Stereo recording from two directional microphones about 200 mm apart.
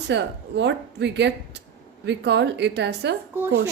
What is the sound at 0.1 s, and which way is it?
A woman's voice, 60° right (ahead or behind).